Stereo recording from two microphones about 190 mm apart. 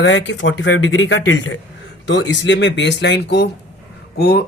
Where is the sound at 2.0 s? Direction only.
70° left (ahead or behind).